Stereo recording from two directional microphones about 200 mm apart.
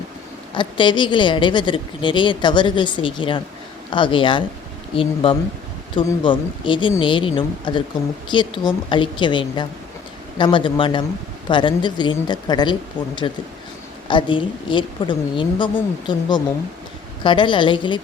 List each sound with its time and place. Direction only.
0.5 s a woman's voice: 25° left (ahead or behind)
17.2 s a woman's voice: 25° left (ahead or behind)